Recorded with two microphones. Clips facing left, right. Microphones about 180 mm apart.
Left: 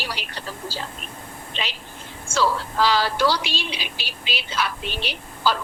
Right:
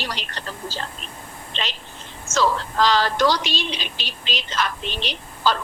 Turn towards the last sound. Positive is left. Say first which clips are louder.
# right 1 dB
turn(degrees=10)  # may be behind; listen again after turning